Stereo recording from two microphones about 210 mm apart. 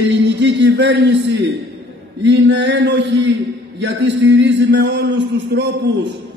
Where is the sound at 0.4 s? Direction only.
60° right (ahead or behind).